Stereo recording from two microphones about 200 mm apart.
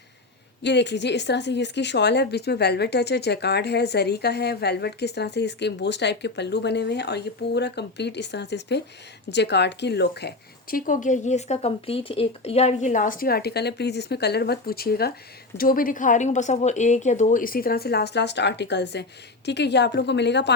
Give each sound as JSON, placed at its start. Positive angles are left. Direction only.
{"t": 0.6, "sound": "speech", "side_deg": 60}